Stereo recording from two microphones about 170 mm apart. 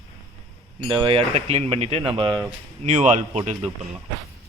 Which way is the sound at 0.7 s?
30° right (ahead or behind).